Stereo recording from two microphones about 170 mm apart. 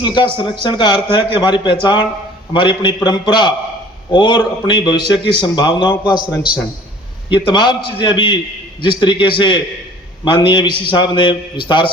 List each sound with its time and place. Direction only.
0.0 s a man's voice: 25° left (ahead or behind)
6.0 s a man's voice: 5° right (ahead or behind)
7.3 s a man's voice: 25° left (ahead or behind)